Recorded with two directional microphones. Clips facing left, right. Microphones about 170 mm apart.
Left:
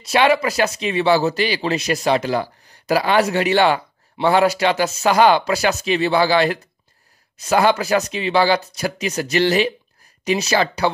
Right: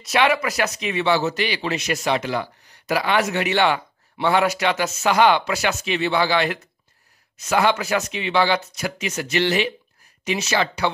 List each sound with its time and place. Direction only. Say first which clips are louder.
0.0 s speech: left 3 dB; 30° left (ahead or behind)